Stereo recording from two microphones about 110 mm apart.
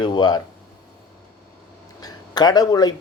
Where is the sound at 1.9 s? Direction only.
40° left (ahead or behind).